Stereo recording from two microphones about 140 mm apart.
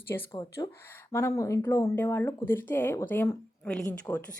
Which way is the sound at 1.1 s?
20° left (ahead or behind).